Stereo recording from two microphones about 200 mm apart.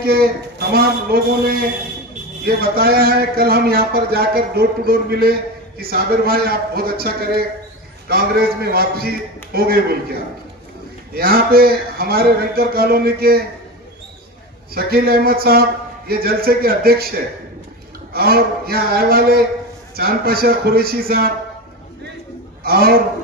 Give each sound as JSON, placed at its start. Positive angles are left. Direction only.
{"t": 0.0, "sound": "speech", "side_deg": -50}
{"t": 11.1, "sound": "speech", "side_deg": -50}
{"t": 14.7, "sound": "speech", "side_deg": -50}
{"t": 18.1, "sound": "speech", "side_deg": -50}
{"t": 22.6, "sound": "a man's voice", "side_deg": -50}